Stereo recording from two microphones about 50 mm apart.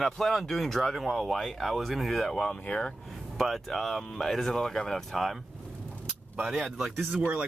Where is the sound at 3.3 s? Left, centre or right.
Centre.